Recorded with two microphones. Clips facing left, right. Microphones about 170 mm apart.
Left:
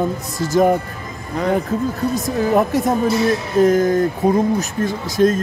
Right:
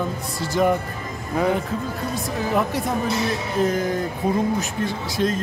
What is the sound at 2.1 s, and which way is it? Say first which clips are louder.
Speech: left 6 dB; 45° left (ahead or behind).